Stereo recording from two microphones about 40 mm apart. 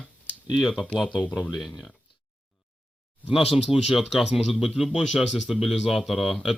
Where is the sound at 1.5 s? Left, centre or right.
Centre.